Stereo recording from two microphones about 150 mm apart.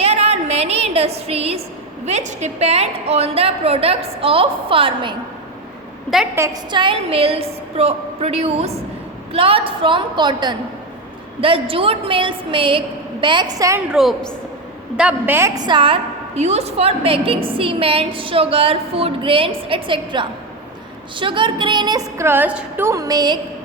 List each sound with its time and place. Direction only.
0.0 s a sound: 45° right (ahead or behind)
2.0 s a woman's voice: 50° right (ahead or behind)
6.3 s a woman's voice: 20° right (ahead or behind)
6.7 s a woman's voice: 35° right (ahead or behind)
13.9 s a woman's voice: centre (ahead or behind)
14.9 s a woman's voice: 10° right (ahead or behind); by 22.3 s 25° right (ahead or behind)
22.3 s a woman's voice: 10° right (ahead or behind)
22.9 s a woman's voice: 25° right (ahead or behind)